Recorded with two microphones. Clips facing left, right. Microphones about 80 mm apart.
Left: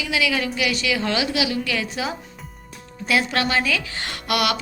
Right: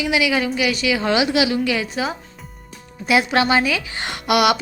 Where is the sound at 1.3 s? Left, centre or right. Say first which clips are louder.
Right 5 dB; right.